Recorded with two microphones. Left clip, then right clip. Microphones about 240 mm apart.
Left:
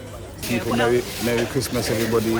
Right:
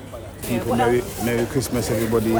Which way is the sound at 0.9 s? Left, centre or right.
Centre.